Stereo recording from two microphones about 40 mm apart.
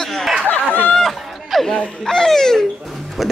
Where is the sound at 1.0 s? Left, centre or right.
Centre.